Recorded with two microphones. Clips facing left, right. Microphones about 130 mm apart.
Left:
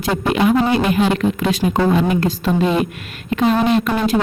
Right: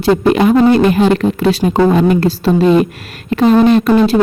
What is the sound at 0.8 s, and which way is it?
Speech, 40° right (ahead or behind).